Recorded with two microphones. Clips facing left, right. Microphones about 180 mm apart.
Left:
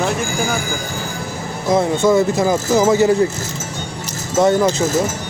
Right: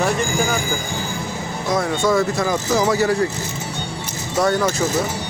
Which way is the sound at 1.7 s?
20° left (ahead or behind).